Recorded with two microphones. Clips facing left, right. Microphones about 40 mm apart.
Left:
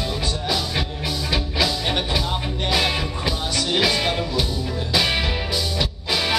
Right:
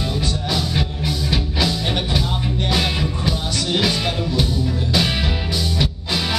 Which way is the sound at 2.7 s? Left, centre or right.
Centre.